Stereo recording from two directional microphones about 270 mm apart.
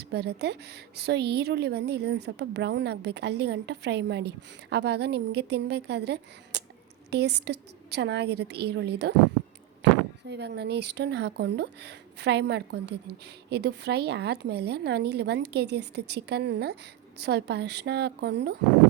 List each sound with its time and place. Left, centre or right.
0.1 s a woman's voice: right
10.2 s a woman's voice: right